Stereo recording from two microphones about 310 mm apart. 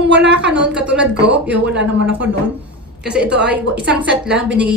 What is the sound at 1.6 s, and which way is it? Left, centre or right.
Speech, right.